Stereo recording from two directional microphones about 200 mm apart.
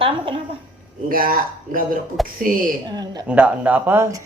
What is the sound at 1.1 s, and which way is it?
Speech, 45° right (ahead or behind).